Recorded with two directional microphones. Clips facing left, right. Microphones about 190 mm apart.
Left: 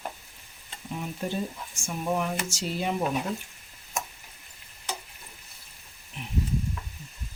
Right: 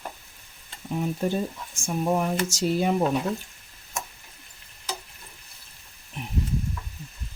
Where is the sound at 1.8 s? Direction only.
40° right (ahead or behind).